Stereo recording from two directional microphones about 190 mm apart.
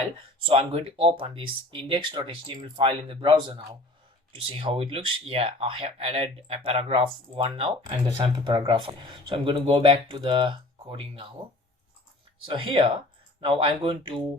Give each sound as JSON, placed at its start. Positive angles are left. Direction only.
{"t": 0.4, "sound": "speech", "side_deg": -30}
{"t": 12.5, "sound": "speech", "side_deg": -25}